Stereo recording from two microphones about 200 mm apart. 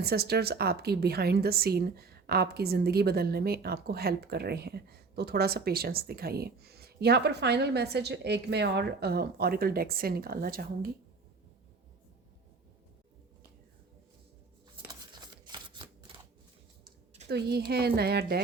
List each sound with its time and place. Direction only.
0.0 s a woman's voice: 55° right (ahead or behind)
14.8 s shuffling cards: 20° right (ahead or behind)
17.2 s a woman's voice: 55° right (ahead or behind)